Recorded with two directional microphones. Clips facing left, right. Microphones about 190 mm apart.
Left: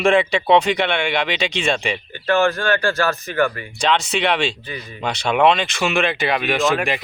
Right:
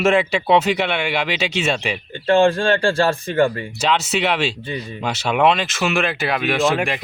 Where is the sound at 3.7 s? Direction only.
5° right (ahead or behind).